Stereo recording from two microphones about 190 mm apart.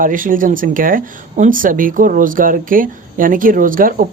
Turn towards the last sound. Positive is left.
turn(degrees=-45)  # may be behind; listen again after turning